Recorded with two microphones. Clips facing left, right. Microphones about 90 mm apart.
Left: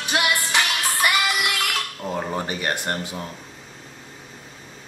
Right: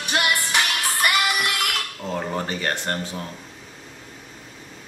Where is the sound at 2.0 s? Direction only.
10° left (ahead or behind).